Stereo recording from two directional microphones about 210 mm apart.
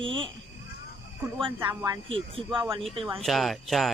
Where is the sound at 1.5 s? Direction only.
15° right (ahead or behind).